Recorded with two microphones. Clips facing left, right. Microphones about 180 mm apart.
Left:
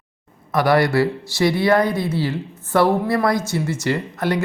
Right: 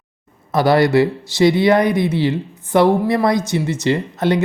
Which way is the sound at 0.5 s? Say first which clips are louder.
Right 3 dB; 25° right (ahead or behind).